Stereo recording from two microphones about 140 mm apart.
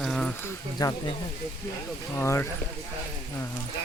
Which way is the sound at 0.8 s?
25° left (ahead or behind).